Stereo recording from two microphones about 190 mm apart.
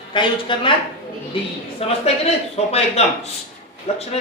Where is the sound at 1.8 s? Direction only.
30° left (ahead or behind).